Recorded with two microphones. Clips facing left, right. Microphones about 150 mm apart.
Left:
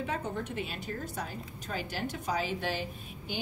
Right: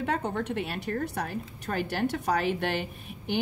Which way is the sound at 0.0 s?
65° right (ahead or behind).